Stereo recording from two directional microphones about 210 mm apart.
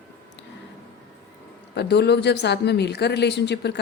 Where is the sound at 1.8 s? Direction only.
55° left (ahead or behind).